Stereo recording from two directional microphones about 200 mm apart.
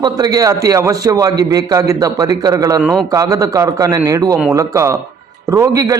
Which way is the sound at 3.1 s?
15° right (ahead or behind).